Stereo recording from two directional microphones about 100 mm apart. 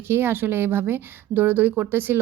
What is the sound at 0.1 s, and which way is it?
A woman's voice, 25° right (ahead or behind).